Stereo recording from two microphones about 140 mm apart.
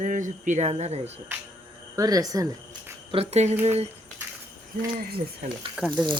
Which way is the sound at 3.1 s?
45° right (ahead or behind).